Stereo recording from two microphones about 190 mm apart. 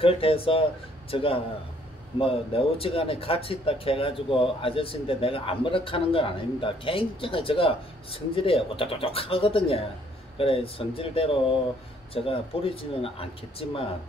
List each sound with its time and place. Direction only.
0.0 s speech: 30° left (ahead or behind)